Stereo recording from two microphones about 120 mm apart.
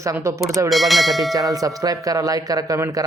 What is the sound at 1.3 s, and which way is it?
Speech, 30° right (ahead or behind).